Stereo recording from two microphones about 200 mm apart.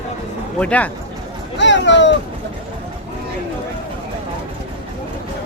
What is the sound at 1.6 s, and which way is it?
Speech, 60° left (ahead or behind).